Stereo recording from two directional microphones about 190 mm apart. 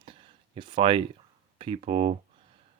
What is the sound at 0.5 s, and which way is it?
Speech, 25° right (ahead or behind).